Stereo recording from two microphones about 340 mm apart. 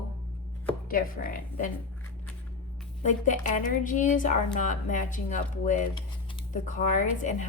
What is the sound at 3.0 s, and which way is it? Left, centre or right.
Speech, left.